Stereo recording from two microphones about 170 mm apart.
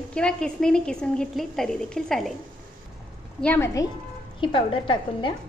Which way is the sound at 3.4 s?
10° left (ahead or behind).